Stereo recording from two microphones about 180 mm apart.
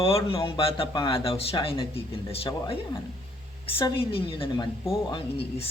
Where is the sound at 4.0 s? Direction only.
30° left (ahead or behind).